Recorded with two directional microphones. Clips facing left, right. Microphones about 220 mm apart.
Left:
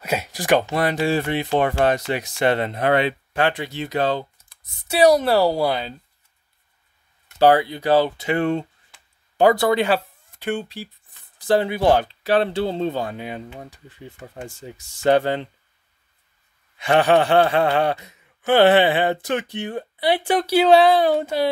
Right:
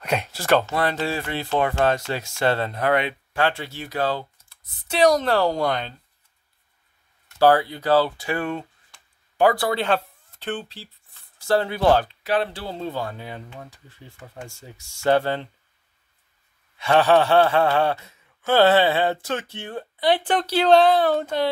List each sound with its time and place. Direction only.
0.0 s speech: 5° left (ahead or behind)
0.3 s gasp: 15° left (ahead or behind)
1.8 s speech: 15° left (ahead or behind)
3.3 s speech: 15° left (ahead or behind)
4.8 s gasp: 10° left (ahead or behind)
7.3 s speech: 15° left (ahead or behind)
9.8 s speech: 10° left (ahead or behind)
12.1 s speech: 30° left (ahead or behind)
13.6 s gasp: 15° left (ahead or behind)
16.7 s gasp: 15° left (ahead or behind)